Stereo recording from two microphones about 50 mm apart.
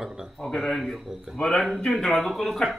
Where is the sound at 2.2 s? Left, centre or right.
Centre.